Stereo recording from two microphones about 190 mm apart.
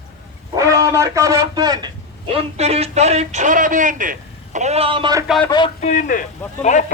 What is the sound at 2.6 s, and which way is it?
A man's voice, 35° right (ahead or behind).